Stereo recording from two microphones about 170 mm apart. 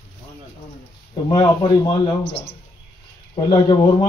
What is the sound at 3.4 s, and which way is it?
Speech, 25° left (ahead or behind).